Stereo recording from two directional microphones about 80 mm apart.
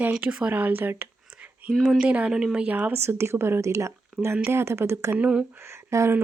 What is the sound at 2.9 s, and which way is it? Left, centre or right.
Speech, right.